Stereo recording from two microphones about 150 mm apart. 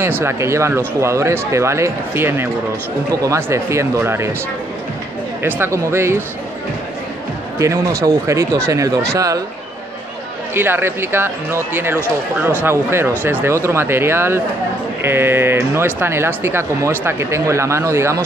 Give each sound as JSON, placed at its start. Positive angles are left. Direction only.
{"t": 0.0, "sound": "speech", "side_deg": -15}
{"t": 5.4, "sound": "speech", "side_deg": -15}
{"t": 7.5, "sound": "speech", "side_deg": -20}
{"t": 10.5, "sound": "speech", "side_deg": -15}